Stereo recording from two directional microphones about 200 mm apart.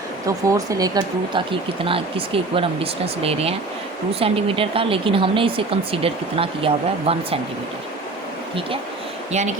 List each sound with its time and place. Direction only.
0.3 s speech: 15° right (ahead or behind)
9.3 s speech: 35° right (ahead or behind)